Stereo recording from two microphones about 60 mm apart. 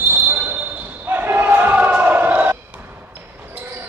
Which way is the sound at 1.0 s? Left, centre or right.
Right.